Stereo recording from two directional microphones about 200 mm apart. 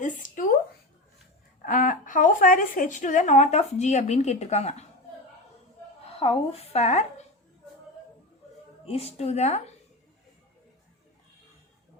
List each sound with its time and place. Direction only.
0.0 s a sound: 40° left (ahead or behind)
1.6 s a woman's voice: 40° left (ahead or behind)
6.1 s a woman's voice: 30° left (ahead or behind)
8.9 s speech: 30° left (ahead or behind)